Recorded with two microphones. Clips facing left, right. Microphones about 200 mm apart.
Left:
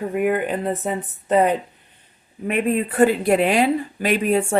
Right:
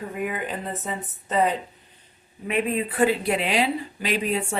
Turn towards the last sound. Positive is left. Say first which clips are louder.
# left 7 dB
turn(degrees=50)  # may be behind; listen again after turning